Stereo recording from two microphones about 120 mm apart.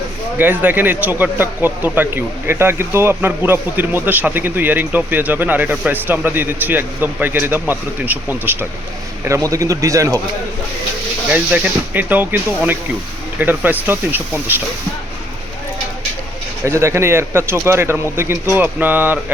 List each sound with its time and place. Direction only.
0.3 s speech: 15° right (ahead or behind)
9.2 s speech: 25° right (ahead or behind)
11.3 s speech: 10° right (ahead or behind)
16.6 s speech: 20° right (ahead or behind)